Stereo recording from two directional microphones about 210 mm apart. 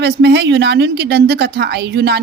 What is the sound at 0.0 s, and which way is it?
Speech, 55° right (ahead or behind).